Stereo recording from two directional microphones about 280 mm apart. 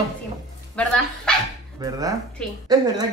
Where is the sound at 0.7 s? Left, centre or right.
Centre.